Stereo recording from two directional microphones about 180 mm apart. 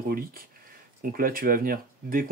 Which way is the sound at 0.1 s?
55° right (ahead or behind).